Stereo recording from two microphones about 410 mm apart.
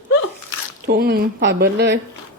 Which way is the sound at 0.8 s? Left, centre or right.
Right.